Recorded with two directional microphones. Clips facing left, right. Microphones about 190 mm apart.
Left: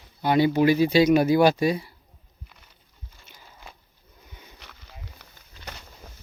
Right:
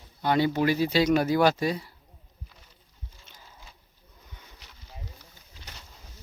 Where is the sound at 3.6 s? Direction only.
60° left (ahead or behind).